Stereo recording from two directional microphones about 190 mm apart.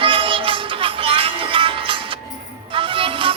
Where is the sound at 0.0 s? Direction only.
25° right (ahead or behind).